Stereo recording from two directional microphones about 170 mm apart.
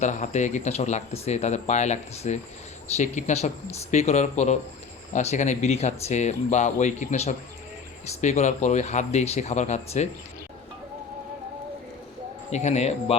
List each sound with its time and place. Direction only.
0.0 s speech: 45° left (ahead or behind)
12.5 s speech: 40° left (ahead or behind)